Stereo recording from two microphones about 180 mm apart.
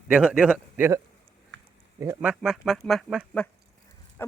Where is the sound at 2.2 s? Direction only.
5° right (ahead or behind).